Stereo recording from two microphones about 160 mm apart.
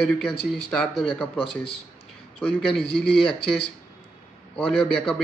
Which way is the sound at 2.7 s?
Centre (ahead or behind).